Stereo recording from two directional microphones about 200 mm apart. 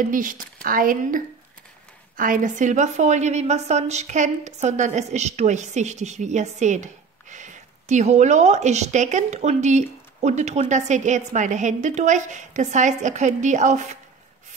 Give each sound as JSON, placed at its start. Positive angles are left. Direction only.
{"t": 0.0, "sound": "a woman's voice", "side_deg": -40}